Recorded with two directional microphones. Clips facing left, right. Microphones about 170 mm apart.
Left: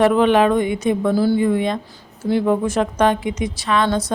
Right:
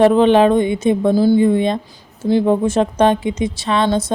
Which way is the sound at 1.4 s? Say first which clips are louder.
Right 4 dB; 25° right (ahead or behind).